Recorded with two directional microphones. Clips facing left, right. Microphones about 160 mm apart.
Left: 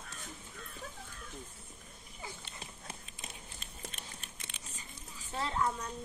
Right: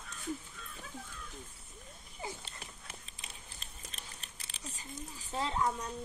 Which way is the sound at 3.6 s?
35° right (ahead or behind).